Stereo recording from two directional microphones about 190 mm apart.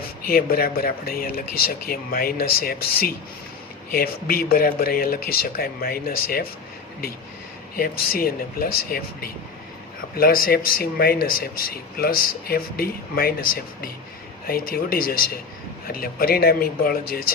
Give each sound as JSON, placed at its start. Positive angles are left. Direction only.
{"t": 0.3, "sound": "speech", "side_deg": 50}
{"t": 7.8, "sound": "speech", "side_deg": 50}